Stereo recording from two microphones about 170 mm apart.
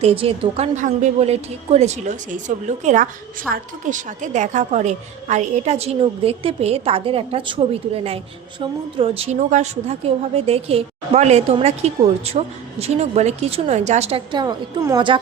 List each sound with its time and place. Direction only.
0.0 s a woman's voice: 35° right (ahead or behind)
14.3 s a woman's voice: 25° right (ahead or behind)